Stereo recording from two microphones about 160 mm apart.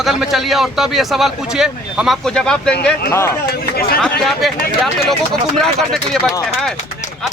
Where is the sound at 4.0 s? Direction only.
Centre (ahead or behind).